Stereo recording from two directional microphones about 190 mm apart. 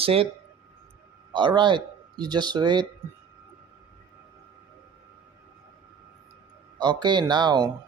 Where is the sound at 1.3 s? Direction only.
25° right (ahead or behind).